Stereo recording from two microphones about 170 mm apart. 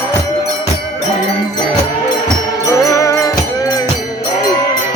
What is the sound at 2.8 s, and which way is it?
Music, 20° left (ahead or behind).